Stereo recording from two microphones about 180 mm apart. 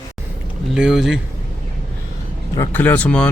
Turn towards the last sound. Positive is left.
turn(degrees=5)  # may be behind; listen again after turning